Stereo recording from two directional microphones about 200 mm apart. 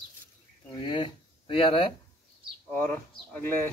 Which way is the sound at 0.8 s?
25° left (ahead or behind).